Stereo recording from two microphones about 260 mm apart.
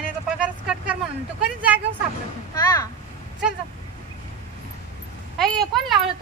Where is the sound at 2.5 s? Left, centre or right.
Centre.